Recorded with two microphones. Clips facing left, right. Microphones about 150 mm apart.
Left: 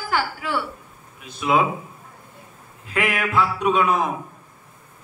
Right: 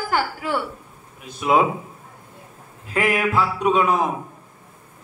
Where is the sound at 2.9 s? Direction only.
35° right (ahead or behind).